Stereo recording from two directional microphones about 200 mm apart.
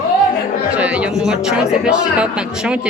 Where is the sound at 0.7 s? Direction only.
5° right (ahead or behind).